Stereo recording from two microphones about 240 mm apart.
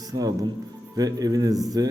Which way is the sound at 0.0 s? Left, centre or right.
Centre.